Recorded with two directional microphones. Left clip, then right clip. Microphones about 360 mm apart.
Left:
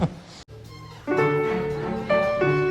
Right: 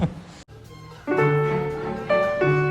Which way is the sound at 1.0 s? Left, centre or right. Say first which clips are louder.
Right 1 dB; centre.